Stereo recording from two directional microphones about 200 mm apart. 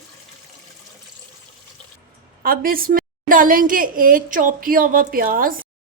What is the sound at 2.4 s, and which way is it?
A woman's voice, 45° right (ahead or behind).